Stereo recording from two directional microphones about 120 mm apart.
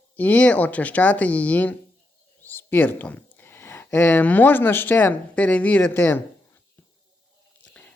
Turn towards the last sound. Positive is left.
turn(degrees=15)  # may be behind; listen again after turning